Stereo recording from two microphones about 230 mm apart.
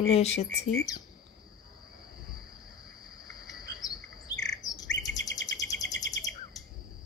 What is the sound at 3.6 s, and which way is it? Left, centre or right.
Cricket, centre.